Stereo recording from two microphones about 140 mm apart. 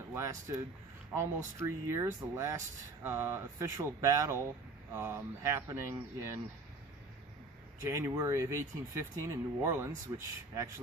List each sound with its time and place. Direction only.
0.1 s speech: 20° right (ahead or behind)
1.6 s speech: 20° right (ahead or behind)
7.8 s speech: 20° right (ahead or behind)